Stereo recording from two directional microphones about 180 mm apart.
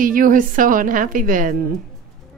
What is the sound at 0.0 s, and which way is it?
A woman's voice, 50° right (ahead or behind).